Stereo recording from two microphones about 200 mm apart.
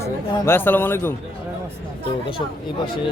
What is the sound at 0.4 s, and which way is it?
Speech, 10° left (ahead or behind).